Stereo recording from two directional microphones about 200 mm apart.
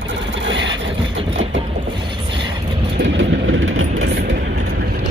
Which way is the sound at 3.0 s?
60° right (ahead or behind).